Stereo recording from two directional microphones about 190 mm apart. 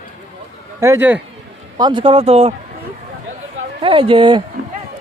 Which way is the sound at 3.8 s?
25° right (ahead or behind).